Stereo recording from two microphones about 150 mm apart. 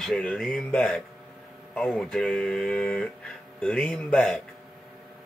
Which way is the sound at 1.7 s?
5° left (ahead or behind).